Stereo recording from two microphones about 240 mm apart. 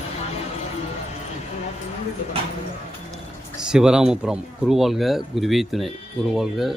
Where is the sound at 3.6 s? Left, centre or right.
Centre.